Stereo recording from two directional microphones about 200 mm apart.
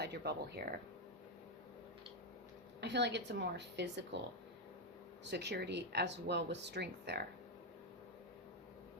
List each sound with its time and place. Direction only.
0.0 s speech: 55° right (ahead or behind)
2.8 s speech: 60° right (ahead or behind)
5.2 s speech: 60° right (ahead or behind)